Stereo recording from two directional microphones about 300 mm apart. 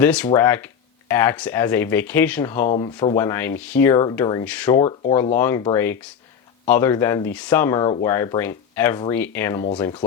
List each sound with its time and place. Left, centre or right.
0.0 s speech: centre